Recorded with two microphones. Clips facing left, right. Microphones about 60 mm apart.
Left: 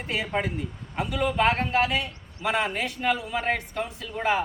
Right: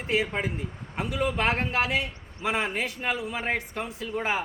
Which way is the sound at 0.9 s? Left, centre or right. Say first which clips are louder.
Left 3 dB; centre.